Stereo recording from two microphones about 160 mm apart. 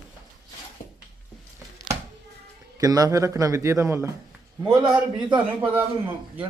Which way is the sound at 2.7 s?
20° right (ahead or behind).